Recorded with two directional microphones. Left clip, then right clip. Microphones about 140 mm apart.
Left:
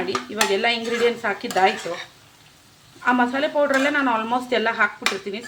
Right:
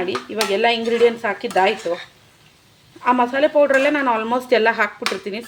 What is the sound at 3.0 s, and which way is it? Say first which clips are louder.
Speech: right 4 dB; 30° right (ahead or behind).